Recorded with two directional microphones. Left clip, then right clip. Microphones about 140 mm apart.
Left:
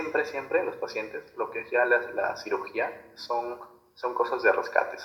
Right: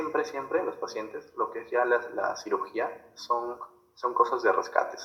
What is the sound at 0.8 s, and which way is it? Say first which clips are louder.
Speech: left 1 dB; 10° right (ahead or behind).